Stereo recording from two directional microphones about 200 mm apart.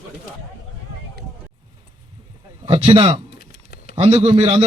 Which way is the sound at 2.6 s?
30° right (ahead or behind).